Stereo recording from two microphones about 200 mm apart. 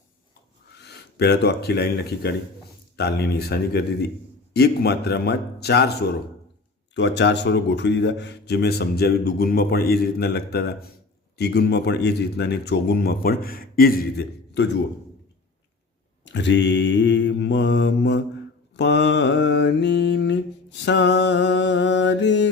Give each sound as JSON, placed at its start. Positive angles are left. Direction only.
{"t": 0.8, "sound": "speech", "side_deg": 55}
{"t": 2.9, "sound": "mantra", "side_deg": 55}
{"t": 4.5, "sound": "speech", "side_deg": 55}
{"t": 6.9, "sound": "speech", "side_deg": 60}
{"t": 16.2, "sound": "mantra", "side_deg": 60}